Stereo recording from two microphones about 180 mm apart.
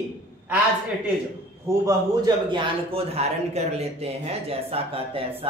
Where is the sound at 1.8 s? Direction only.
25° right (ahead or behind).